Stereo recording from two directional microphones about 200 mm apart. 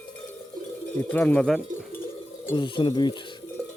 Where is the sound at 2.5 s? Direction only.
25° left (ahead or behind).